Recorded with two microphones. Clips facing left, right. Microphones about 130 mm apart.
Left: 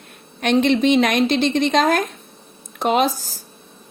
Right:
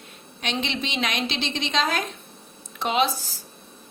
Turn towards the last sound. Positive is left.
turn(degrees=45)  # may be behind; listen again after turning